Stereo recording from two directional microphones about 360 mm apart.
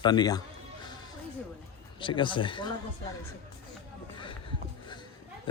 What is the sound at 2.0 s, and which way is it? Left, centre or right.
Speech, centre.